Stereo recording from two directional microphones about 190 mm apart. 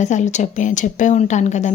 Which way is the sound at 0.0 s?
40° left (ahead or behind).